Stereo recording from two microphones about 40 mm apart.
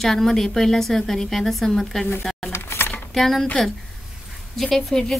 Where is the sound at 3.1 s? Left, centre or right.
Centre.